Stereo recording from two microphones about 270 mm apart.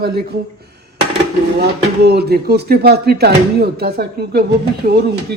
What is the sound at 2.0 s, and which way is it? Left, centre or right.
Speech, right.